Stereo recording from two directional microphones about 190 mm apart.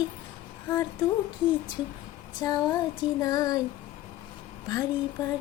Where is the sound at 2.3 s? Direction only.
20° left (ahead or behind).